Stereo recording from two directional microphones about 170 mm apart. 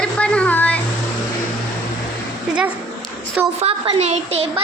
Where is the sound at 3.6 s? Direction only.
35° right (ahead or behind).